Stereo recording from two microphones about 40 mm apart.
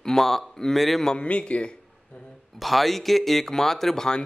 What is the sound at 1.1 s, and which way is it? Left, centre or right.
Speech, left.